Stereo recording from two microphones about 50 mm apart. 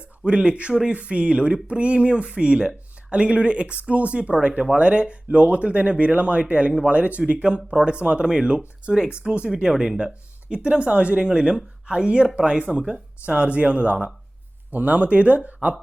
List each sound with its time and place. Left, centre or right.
0.3 s speech: right